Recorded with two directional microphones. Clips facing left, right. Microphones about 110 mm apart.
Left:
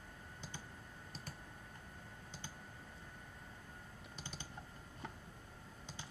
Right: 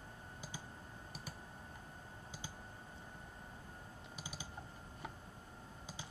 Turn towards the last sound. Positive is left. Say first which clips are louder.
# right 1 dB
turn(degrees=-10)  # may be behind; listen again after turning